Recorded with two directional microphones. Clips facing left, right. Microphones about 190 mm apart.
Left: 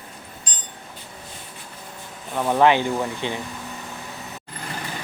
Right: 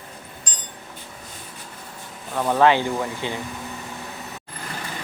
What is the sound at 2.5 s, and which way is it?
Speech, 15° left (ahead or behind).